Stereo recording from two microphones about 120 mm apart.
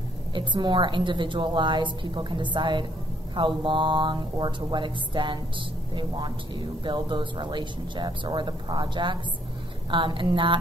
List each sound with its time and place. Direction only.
0.3 s speech: 40° right (ahead or behind)